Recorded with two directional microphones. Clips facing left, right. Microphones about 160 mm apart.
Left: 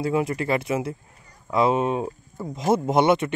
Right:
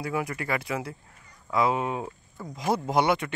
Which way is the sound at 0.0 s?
25° left (ahead or behind).